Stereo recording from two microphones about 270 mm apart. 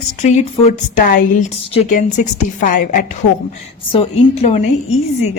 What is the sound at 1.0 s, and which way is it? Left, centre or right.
Speech, left.